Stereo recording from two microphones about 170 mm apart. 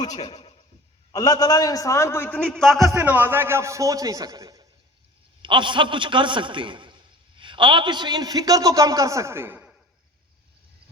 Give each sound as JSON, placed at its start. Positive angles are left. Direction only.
{"t": 0.3, "sound": "a sound", "side_deg": 35}
{"t": 1.1, "sound": "a man's voice", "side_deg": 20}
{"t": 2.8, "sound": "a man's voice", "side_deg": -15}